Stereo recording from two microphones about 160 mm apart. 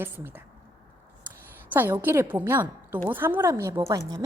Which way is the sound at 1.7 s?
10° right (ahead or behind).